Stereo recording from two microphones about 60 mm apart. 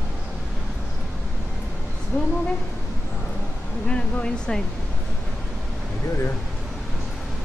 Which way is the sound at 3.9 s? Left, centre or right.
Centre.